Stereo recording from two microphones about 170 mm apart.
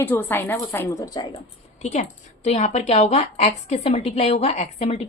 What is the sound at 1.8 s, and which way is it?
A woman's voice, 40° left (ahead or behind).